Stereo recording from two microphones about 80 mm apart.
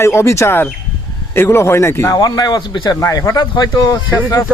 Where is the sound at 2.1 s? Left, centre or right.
Left.